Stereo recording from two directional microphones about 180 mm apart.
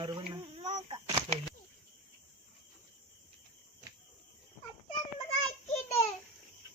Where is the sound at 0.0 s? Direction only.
25° right (ahead or behind).